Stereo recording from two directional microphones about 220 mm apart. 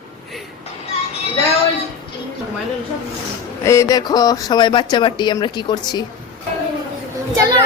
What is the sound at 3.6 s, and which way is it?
Speech, 15° left (ahead or behind).